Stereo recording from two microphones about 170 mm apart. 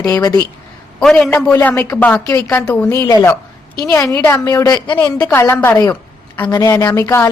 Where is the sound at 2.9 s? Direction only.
20° left (ahead or behind).